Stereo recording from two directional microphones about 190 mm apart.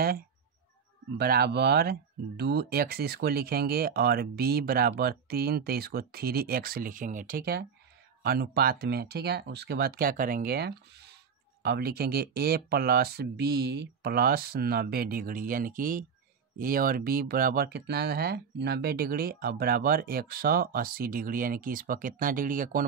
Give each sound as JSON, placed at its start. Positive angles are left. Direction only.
{"t": 1.1, "sound": "speech", "side_deg": -55}